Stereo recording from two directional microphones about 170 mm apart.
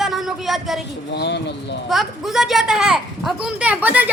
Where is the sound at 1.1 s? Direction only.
80° left.